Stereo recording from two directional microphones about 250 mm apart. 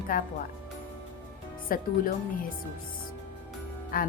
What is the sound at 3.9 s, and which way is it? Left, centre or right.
Speech, left.